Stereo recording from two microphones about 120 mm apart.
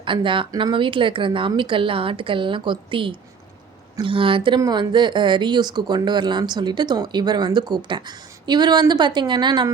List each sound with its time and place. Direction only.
0.0 s speech: 45° right (ahead or behind)